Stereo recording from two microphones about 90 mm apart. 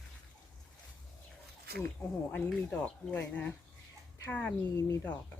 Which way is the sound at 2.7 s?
20° left (ahead or behind).